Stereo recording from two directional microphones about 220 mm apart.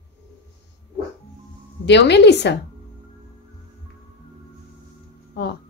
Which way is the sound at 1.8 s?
50° left (ahead or behind).